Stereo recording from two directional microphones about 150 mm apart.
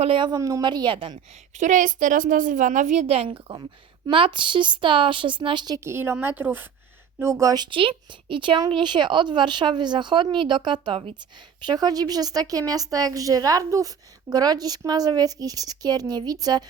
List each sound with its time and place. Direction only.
0.0 s a woman's voice: 35° right (ahead or behind)
1.5 s a woman's voice: 55° right (ahead or behind); by 16.6 s 25° right (ahead or behind)